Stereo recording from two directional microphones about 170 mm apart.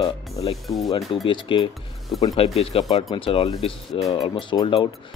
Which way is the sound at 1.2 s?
30° left (ahead or behind).